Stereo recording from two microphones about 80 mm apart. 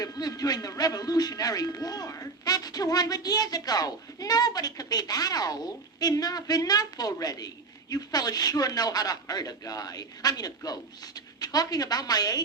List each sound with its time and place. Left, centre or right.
0.0 s a man's voice: left